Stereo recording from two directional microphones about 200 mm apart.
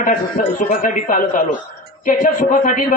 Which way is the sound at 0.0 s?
40° left (ahead or behind).